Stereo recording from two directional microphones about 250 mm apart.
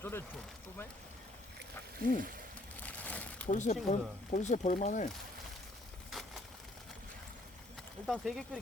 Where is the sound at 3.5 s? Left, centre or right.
Left.